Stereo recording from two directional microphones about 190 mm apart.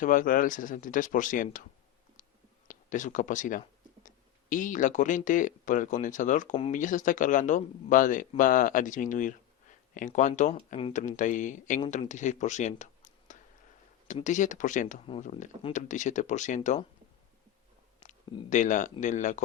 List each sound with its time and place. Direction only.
0.0 s speech: 45° left (ahead or behind)
2.6 s speech: 40° left (ahead or behind)
18.5 s speech: 40° left (ahead or behind)